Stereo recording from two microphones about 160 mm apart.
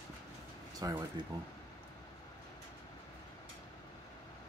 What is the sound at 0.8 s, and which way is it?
Speech, 25° right (ahead or behind).